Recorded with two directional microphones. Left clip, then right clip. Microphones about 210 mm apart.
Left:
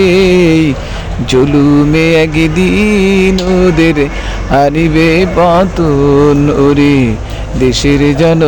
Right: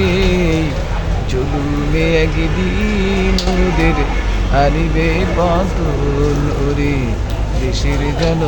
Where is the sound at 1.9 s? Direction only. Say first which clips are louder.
Left 7 dB; 45° left (ahead or behind).